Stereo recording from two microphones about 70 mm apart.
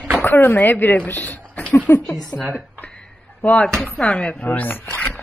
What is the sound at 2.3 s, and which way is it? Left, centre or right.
Speech, left.